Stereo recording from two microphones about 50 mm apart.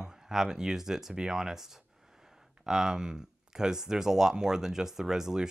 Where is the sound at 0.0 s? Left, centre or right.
Centre.